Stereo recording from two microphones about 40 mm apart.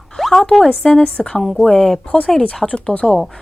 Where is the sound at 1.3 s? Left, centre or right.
Centre.